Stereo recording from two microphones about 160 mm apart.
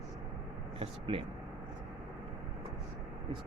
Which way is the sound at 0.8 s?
35° right (ahead or behind).